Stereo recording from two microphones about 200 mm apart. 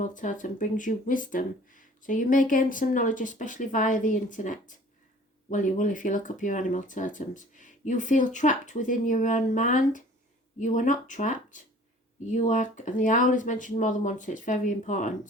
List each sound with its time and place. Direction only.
0.0 s speech: 40° left (ahead or behind)